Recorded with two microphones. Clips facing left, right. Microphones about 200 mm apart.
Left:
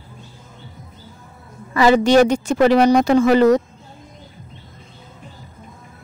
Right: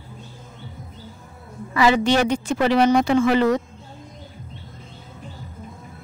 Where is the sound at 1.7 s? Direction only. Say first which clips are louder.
Left 4 dB; 40° left (ahead or behind).